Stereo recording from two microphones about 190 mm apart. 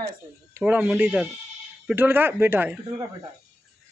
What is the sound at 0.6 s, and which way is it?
Speech, 10° right (ahead or behind).